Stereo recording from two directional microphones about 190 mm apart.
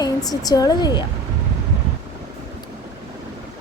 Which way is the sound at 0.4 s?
20° left (ahead or behind).